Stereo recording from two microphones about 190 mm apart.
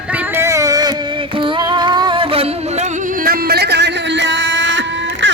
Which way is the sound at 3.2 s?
60° right (ahead or behind).